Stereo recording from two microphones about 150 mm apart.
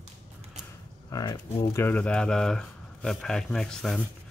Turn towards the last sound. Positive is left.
turn(degrees=5)  # may be behind; listen again after turning